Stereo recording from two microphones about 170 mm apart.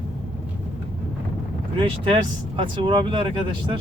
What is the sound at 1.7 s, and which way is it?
Speech, 30° right (ahead or behind).